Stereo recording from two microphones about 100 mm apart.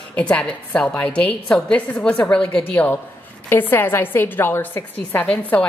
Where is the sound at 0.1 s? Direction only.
10° left (ahead or behind).